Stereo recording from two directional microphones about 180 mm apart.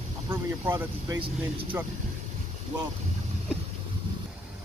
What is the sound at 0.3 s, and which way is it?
Speech, 15° right (ahead or behind).